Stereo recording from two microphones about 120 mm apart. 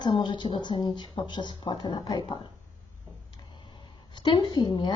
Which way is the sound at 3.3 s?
40° left (ahead or behind).